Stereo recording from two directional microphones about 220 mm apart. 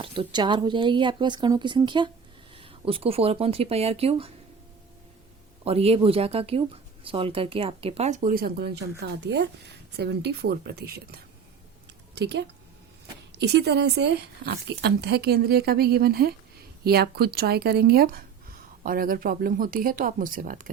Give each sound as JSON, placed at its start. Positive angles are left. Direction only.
{"t": 0.0, "sound": "speech", "side_deg": -25}
{"t": 5.6, "sound": "speech", "side_deg": -25}